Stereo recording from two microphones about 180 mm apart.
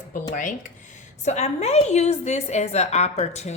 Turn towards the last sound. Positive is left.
turn(degrees=40)  # may be behind; listen again after turning